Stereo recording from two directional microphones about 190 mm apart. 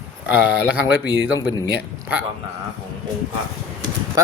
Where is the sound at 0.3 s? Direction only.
10° right (ahead or behind).